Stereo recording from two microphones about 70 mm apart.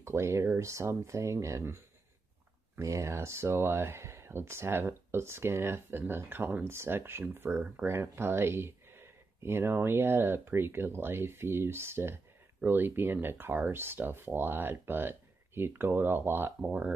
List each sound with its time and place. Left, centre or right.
0.0 s speech: right
2.8 s speech: right
16.6 s speech: centre